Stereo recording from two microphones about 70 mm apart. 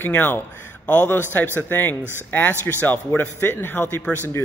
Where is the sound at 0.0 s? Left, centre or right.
Left.